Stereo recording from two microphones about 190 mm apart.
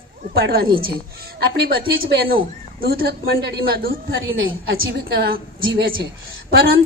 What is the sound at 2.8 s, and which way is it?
A woman's voice, 50° right (ahead or behind).